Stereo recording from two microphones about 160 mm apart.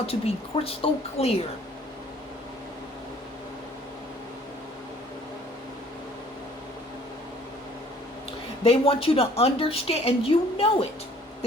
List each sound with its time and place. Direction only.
0.0 s a woman's voice: 35° left (ahead or behind)
8.6 s a woman's voice: 35° left (ahead or behind)